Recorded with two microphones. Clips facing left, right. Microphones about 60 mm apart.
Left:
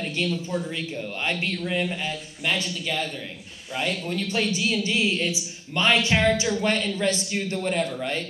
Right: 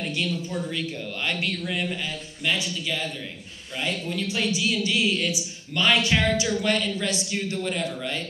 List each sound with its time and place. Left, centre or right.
0.7 s speech: left
2.4 s a woman's voice: left